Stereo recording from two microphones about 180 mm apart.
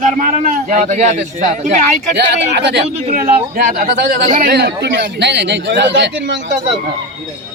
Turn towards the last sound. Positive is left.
turn(degrees=-75)  # may be behind; listen again after turning